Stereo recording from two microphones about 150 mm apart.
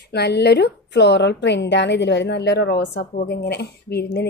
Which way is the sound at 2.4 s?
90° left.